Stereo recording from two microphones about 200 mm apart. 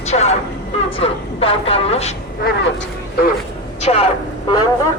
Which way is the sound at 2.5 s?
50° left (ahead or behind).